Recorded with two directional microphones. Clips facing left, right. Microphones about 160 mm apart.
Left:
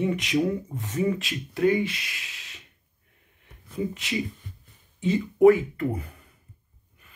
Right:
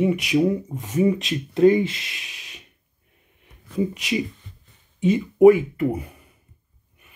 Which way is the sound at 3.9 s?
15° right (ahead or behind).